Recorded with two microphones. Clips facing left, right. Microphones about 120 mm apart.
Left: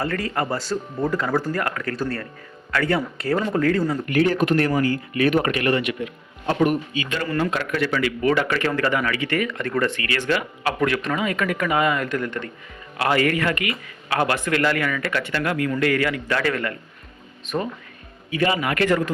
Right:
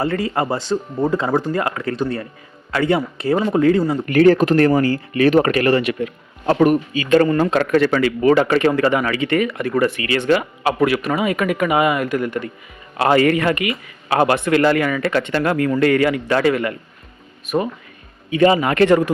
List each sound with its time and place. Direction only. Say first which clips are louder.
0.0 s speech: right 5 dB; 25° right (ahead or behind)
4.0 s speech: right 10 dB; 50° right (ahead or behind)
4.4 s speech: right 5 dB; 40° right (ahead or behind)
7.3 s speech: right 6 dB; 25° right (ahead or behind)
7.5 s speech: right 8 dB; 45° right (ahead or behind); by 10.8 s 25° right (ahead or behind)
10.8 s speech: right 4 dB; 10° right (ahead or behind)
13.0 s speech: right 6 dB; 30° right (ahead or behind)
18.3 s speech: right 7 dB; 25° right (ahead or behind)